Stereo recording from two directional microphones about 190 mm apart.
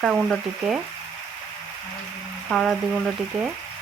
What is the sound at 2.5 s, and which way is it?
Speech, centre (ahead or behind).